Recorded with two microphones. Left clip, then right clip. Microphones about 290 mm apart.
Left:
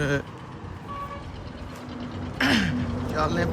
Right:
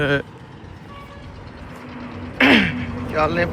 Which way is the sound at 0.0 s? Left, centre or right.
Centre.